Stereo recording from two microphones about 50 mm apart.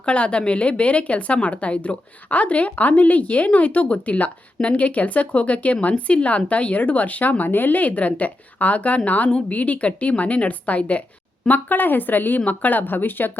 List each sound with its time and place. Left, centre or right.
0.0 s a woman's voice: left